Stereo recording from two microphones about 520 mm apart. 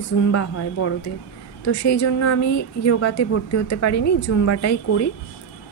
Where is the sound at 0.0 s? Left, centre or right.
Left.